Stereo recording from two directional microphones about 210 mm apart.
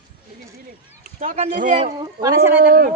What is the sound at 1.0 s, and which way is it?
Speech, 35° right (ahead or behind).